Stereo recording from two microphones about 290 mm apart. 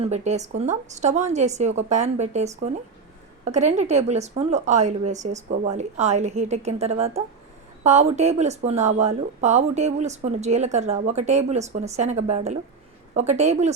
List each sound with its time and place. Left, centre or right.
0.0 s speech: right